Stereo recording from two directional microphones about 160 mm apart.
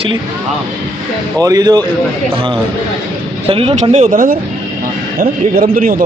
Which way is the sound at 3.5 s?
35° right (ahead or behind).